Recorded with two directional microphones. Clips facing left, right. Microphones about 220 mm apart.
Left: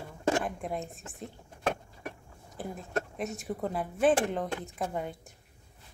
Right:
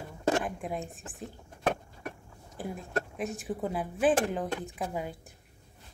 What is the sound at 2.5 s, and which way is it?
Speech, centre (ahead or behind).